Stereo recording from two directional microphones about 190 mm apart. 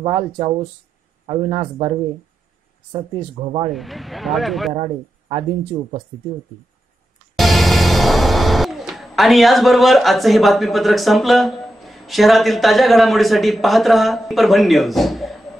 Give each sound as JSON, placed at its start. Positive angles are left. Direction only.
{"t": 0.0, "sound": "speech", "side_deg": -25}
{"t": 3.2, "sound": "speech", "side_deg": -25}
{"t": 3.7, "sound": "speech", "side_deg": 0}
{"t": 7.3, "sound": "music", "side_deg": 0}